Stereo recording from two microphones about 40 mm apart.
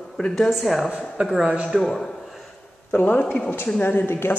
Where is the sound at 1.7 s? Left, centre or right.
Centre.